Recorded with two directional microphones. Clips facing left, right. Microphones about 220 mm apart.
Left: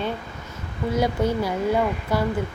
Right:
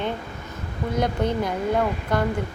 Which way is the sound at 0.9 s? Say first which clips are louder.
Left 1 dB; 5° left (ahead or behind).